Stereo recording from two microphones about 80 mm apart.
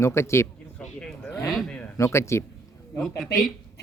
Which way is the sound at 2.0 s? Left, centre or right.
Left.